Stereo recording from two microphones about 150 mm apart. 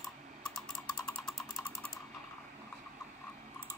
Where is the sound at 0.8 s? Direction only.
25° left (ahead or behind).